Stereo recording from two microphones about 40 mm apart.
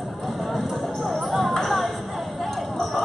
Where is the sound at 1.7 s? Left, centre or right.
Centre.